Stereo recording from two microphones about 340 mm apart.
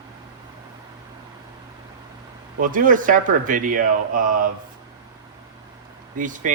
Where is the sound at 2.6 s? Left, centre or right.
Right.